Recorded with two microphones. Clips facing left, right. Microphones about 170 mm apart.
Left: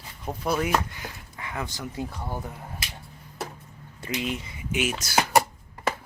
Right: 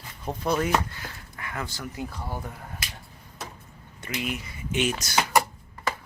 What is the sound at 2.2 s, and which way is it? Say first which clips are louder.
Speech: left 1 dB; 5° left (ahead or behind).